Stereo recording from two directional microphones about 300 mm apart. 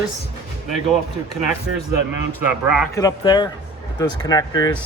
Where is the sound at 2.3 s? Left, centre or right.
Centre.